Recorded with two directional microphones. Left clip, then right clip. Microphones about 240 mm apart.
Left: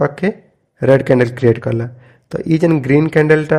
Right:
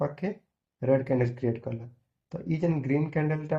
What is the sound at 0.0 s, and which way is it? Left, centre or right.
A man's voice, left.